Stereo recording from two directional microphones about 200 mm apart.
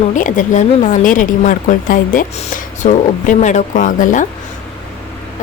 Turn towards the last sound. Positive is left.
turn(degrees=40)  # may be behind; listen again after turning